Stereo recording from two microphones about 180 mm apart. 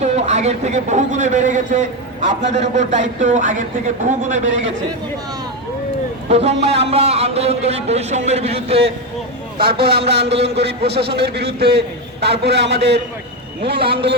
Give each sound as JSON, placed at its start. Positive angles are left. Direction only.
{"t": 0.0, "sound": "a man's voice", "side_deg": -40}
{"t": 6.2, "sound": "a man's voice", "side_deg": -35}
{"t": 9.6, "sound": "a man's voice", "side_deg": -60}